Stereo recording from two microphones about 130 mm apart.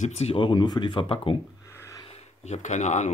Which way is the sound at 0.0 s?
55° left (ahead or behind).